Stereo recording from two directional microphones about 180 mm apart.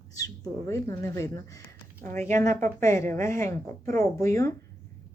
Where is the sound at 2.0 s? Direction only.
40° right (ahead or behind).